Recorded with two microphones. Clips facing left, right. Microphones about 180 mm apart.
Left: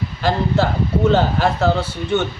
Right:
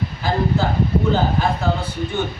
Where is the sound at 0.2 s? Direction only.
75° left (ahead or behind).